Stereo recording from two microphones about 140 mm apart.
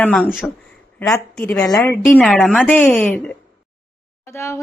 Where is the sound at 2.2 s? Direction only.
5° left (ahead or behind).